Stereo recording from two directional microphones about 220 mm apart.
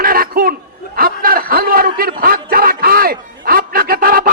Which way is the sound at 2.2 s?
40° right (ahead or behind).